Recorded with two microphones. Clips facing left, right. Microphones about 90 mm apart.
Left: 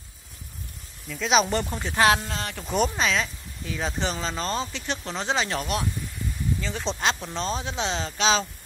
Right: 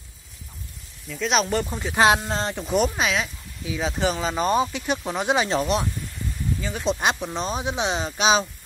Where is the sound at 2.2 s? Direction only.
35° right (ahead or behind).